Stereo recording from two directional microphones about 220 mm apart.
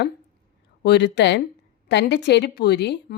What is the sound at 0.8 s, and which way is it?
A woman's voice, 50° left (ahead or behind).